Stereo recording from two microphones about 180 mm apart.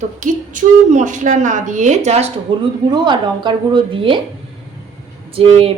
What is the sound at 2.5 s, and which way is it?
Speech, 30° right (ahead or behind).